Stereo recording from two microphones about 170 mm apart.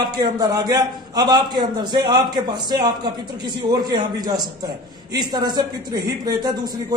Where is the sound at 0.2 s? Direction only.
25° right (ahead or behind).